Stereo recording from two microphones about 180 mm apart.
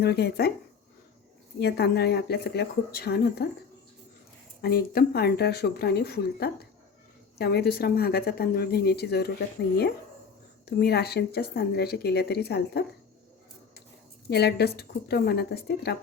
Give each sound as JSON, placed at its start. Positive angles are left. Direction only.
{"t": 0.0, "sound": "speech", "side_deg": 60}
{"t": 1.5, "sound": "speech", "side_deg": 65}
{"t": 4.6, "sound": "speech", "side_deg": 60}
{"t": 10.7, "sound": "speech", "side_deg": 65}
{"t": 14.3, "sound": "speech", "side_deg": 65}